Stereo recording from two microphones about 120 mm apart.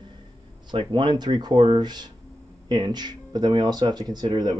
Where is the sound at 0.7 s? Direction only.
40° right (ahead or behind).